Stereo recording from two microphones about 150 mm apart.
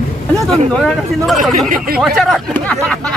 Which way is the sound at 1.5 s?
70° right (ahead or behind).